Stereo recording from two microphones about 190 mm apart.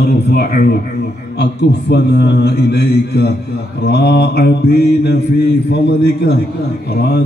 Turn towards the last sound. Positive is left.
turn(degrees=60)  # may be behind; listen again after turning